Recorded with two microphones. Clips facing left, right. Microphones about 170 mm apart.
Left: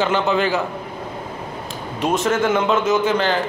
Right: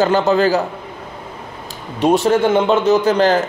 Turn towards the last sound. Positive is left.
turn(degrees=-40)  # may be behind; listen again after turning